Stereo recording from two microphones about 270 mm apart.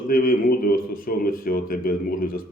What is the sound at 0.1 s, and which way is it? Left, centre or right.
Speech, left.